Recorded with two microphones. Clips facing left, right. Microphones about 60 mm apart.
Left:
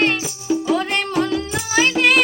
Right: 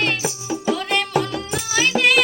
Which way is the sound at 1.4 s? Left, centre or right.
Left.